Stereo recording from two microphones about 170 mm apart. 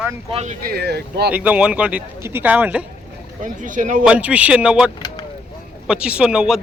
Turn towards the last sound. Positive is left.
turn(degrees=-5)  # may be behind; listen again after turning